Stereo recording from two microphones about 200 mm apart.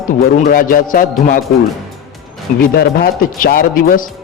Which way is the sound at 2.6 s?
45° left (ahead or behind).